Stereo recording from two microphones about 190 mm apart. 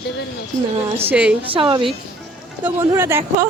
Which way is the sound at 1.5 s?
25° right (ahead or behind).